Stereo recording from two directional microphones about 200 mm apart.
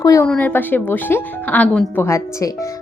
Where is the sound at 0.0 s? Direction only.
15° left (ahead or behind).